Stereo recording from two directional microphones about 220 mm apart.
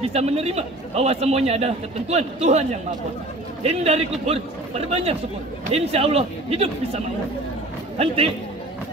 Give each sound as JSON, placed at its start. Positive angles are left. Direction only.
{"t": 0.0, "sound": "a man's voice", "side_deg": -30}